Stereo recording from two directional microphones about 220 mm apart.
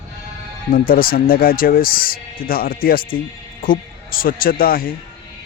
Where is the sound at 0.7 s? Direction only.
40° left (ahead or behind).